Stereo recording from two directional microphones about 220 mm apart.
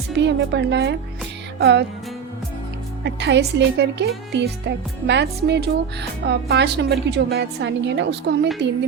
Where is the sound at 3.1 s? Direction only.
55° right (ahead or behind).